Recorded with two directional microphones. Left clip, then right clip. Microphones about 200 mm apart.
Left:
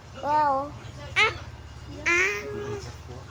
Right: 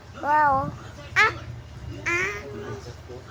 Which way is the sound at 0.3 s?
5° right (ahead or behind).